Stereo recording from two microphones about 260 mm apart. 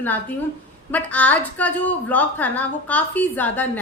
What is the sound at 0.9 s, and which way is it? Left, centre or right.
A woman's voice, centre.